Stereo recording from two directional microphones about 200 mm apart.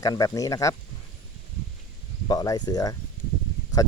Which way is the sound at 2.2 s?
20° left (ahead or behind).